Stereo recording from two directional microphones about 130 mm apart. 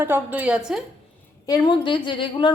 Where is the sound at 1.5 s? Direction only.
30° left (ahead or behind).